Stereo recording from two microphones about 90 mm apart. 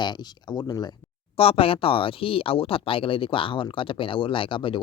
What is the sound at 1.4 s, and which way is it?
Speech, 90° left.